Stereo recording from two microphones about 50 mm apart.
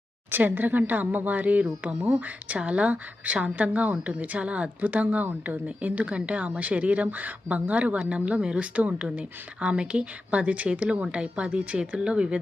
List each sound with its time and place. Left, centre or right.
0.3 s speech: right
2.0 s speech: right
2.5 s a woman's voice: right